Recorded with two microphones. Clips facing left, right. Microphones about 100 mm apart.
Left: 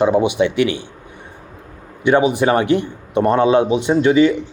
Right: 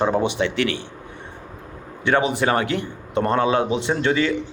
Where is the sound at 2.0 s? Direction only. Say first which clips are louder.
Left 5 dB; 15° left (ahead or behind).